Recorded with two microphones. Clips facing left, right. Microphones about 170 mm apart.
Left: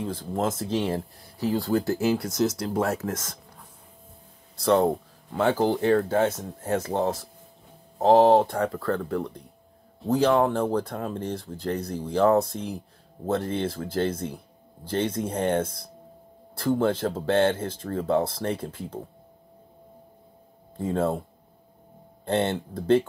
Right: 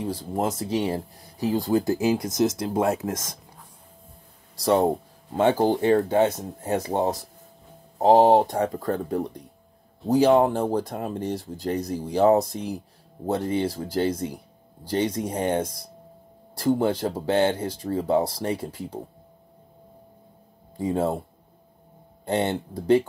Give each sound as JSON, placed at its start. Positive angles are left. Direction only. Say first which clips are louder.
{"t": 0.0, "sound": "speech", "louder": "right 1 dB", "side_deg": -10}
{"t": 0.6, "sound": "speech", "louder": "right 1 dB", "side_deg": 0}
{"t": 1.4, "sound": "speech", "louder": "right 2 dB", "side_deg": -15}
{"t": 4.6, "sound": "speech", "louder": "even", "side_deg": -15}
{"t": 20.7, "sound": "speech", "louder": "right 1 dB", "side_deg": -10}